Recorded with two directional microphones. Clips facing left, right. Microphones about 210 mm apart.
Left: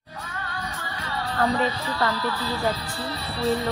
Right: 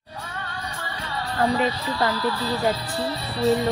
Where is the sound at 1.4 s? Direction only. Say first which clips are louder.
Right 2 dB; 20° right (ahead or behind).